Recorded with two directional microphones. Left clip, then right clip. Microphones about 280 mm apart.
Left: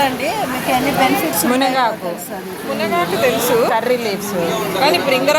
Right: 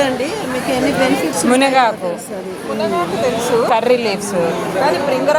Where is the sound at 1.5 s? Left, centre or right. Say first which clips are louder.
Right 4 dB; centre.